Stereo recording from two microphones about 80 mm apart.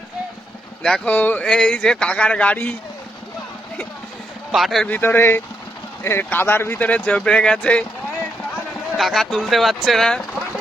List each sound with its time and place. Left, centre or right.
0.8 s speech: centre
1.0 s a man's voice: left
4.5 s speech: centre
4.9 s speech: left
7.0 s speech: centre
9.0 s speech: centre